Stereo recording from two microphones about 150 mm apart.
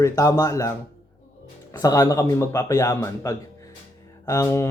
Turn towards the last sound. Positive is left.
turn(degrees=20)  # may be behind; listen again after turning